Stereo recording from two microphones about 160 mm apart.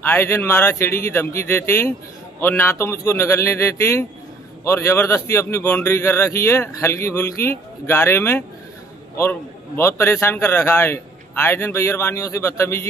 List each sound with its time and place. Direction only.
0.0 s a man's voice: 15° left (ahead or behind)